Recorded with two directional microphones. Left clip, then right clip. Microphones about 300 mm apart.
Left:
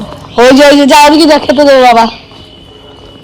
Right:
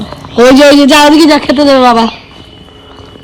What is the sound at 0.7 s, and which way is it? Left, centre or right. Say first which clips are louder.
A man's voice: left 1 dB; left.